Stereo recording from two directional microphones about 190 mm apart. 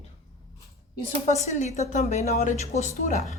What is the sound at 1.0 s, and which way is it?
Speech, 35° left (ahead or behind).